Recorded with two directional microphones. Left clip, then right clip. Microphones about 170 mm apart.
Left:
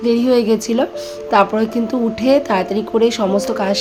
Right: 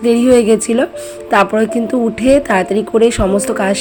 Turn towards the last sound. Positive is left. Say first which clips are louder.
# right 2 dB
turn(degrees=-20)  # may be behind; listen again after turning